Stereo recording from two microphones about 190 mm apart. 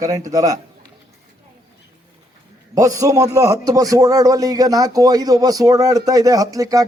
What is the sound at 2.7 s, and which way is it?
A man's voice, 20° right (ahead or behind).